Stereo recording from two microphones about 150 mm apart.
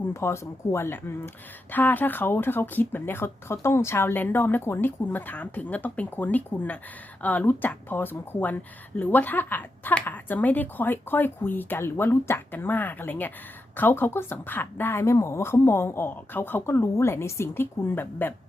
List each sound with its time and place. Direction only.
0.1 s speech: 20° left (ahead or behind)